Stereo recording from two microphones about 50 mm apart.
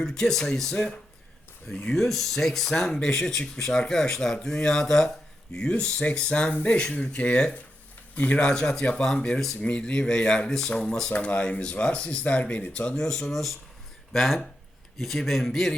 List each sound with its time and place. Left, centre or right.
0.0 s speech: centre
6.5 s speech: left
6.7 s speech: left
8.4 s speech: centre
11.1 s speech: left
12.9 s a man's voice: centre